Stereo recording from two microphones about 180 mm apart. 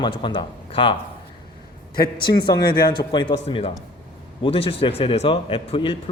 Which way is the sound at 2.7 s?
25° left (ahead or behind).